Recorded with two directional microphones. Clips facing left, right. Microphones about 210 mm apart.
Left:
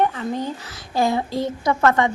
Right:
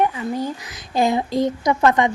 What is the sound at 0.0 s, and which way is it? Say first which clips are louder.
A woman's voice: right 1 dB; 10° right (ahead or behind).